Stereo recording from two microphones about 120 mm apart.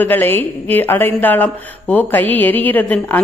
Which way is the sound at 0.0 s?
15° left (ahead or behind).